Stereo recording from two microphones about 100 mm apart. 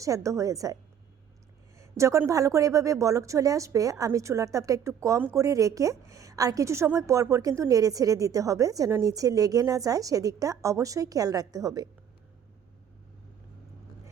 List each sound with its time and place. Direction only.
0.0 s a woman's voice: 30° right (ahead or behind)
1.8 s a woman's voice: 30° right (ahead or behind)